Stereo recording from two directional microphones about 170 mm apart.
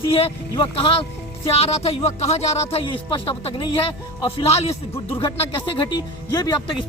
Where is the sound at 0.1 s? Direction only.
30° left (ahead or behind).